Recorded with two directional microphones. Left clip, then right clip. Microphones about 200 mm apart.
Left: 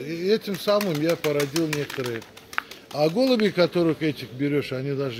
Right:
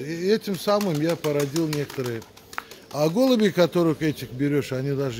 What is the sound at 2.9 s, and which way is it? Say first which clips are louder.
A man's voice: even; 45° right (ahead or behind).